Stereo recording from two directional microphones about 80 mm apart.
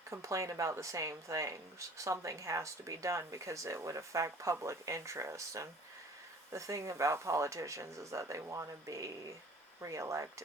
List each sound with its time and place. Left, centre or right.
0.1 s speech: right